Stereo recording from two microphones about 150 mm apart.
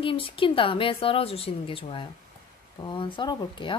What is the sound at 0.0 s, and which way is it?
A woman's voice, 35° left (ahead or behind).